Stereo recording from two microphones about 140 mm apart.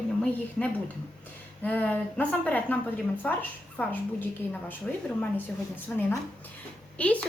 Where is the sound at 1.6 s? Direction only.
10° left (ahead or behind).